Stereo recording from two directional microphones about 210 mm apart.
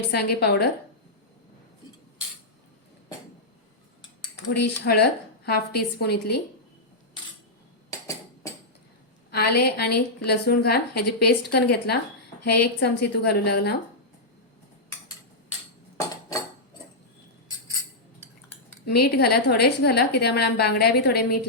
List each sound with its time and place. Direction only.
0.1 s a woman's voice: 50° left (ahead or behind)
4.6 s a woman's voice: 50° left (ahead or behind)
7.9 s a sound: 15° left (ahead or behind)
9.3 s a woman's voice: 50° left (ahead or behind)
18.9 s a woman's voice: 50° left (ahead or behind)